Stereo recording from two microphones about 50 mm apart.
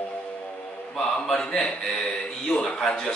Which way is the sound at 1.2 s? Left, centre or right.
Centre.